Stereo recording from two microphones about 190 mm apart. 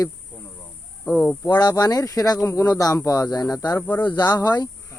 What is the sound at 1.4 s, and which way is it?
Speech, 20° left (ahead or behind).